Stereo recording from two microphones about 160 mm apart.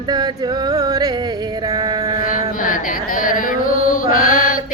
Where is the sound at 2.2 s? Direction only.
60° left (ahead or behind).